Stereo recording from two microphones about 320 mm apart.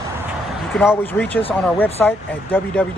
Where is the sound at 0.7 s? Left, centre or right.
Centre.